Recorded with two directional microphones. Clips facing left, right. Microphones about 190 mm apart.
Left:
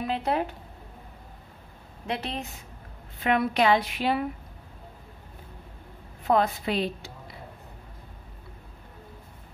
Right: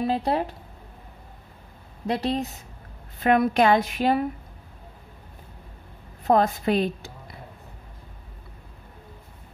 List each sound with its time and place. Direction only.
0.0 s speech: 35° right (ahead or behind)
2.0 s a woman's voice: 35° right (ahead or behind)
6.2 s a woman's voice: 45° right (ahead or behind)